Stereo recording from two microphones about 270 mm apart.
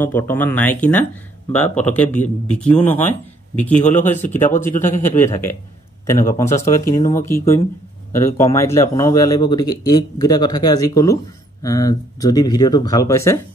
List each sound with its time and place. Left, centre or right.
0.0 s speech: centre
1.9 s a man's voice: centre
3.7 s speech: left
5.1 s speech: centre